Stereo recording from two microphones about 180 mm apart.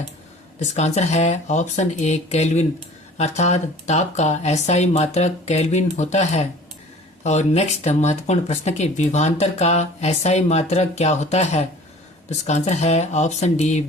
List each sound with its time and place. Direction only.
0.6 s speech: 40° left (ahead or behind)